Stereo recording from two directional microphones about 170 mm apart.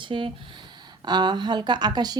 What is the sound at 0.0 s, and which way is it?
A woman's voice, 30° right (ahead or behind).